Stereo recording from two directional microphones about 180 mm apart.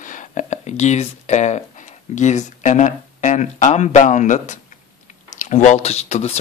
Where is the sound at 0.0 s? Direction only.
45° left (ahead or behind).